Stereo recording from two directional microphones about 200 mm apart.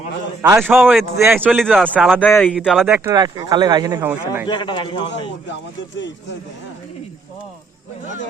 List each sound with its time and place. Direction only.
0.4 s a man's voice: 10° right (ahead or behind)
0.8 s speech: centre (ahead or behind)
2.6 s speech: 5° right (ahead or behind)
2.9 s speech: 15° right (ahead or behind)
4.4 s a man's voice: 25° left (ahead or behind)